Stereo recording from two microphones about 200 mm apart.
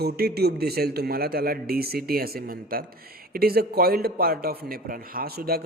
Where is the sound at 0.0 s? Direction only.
50° right (ahead or behind).